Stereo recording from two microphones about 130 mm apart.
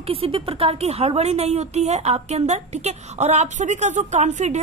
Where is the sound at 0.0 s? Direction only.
45° right (ahead or behind).